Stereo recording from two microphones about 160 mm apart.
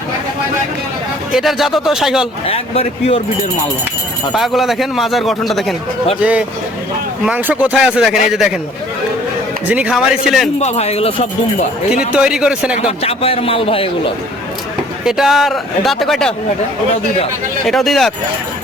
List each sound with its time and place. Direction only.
1.3 s a man's voice: centre (ahead or behind)
2.5 s a man's voice: 40° left (ahead or behind)
4.4 s a man's voice: centre (ahead or behind)
9.6 s a man's voice: 5° right (ahead or behind)
10.6 s a man's voice: 40° left (ahead or behind)
11.9 s a man's voice: 5° right (ahead or behind)
13.0 s a man's voice: 40° left (ahead or behind)
15.0 s a man's voice: centre (ahead or behind)
17.7 s a man's voice: centre (ahead or behind)